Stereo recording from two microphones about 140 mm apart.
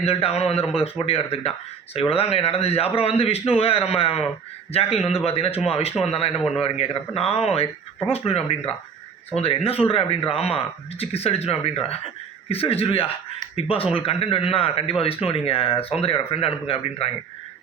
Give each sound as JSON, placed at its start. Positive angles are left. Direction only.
{"t": 0.0, "sound": "speech", "side_deg": 45}
{"t": 6.3, "sound": "a man's voice", "side_deg": 0}
{"t": 6.6, "sound": "speech", "side_deg": 45}